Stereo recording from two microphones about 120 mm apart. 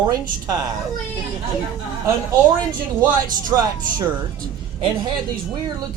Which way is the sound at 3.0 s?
30° right (ahead or behind).